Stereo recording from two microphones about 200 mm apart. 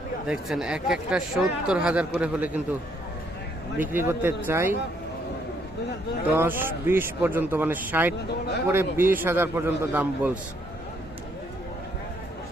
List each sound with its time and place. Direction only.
0.3 s speech: 5° right (ahead or behind)
3.8 s speech: 10° right (ahead or behind)
6.3 s speech: 10° right (ahead or behind)
8.3 s speech: 55° left (ahead or behind)
8.7 s speech: 10° right (ahead or behind)